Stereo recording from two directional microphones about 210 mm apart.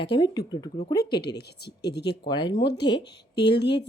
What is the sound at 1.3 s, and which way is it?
Speech, 50° left (ahead or behind).